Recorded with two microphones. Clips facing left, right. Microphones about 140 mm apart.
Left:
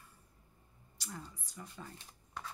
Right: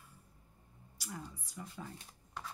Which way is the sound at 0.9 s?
10° right (ahead or behind).